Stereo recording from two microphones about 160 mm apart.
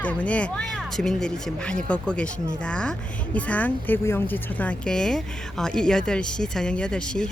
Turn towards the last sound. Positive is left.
turn(degrees=5)  # may be behind; listen again after turning